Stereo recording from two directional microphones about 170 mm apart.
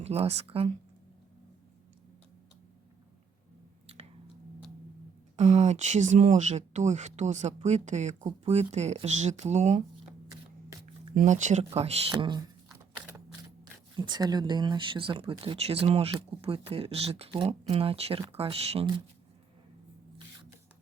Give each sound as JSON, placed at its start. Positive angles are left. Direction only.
{"t": 0.0, "sound": "speech", "side_deg": -40}
{"t": 5.4, "sound": "speech", "side_deg": -40}
{"t": 11.1, "sound": "speech", "side_deg": -50}
{"t": 12.1, "sound": "speech", "side_deg": -25}
{"t": 13.9, "sound": "speech", "side_deg": -25}